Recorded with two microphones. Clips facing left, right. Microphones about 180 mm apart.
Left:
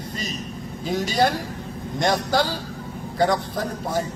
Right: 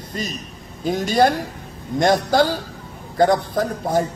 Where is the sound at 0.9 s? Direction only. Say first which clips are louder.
Right 4 dB; 50° right (ahead or behind).